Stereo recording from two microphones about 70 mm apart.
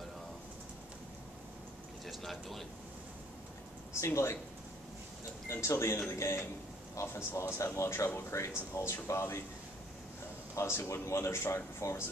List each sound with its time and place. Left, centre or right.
2.0 s speech: centre
3.9 s speech: left
5.5 s speech: left
10.5 s speech: left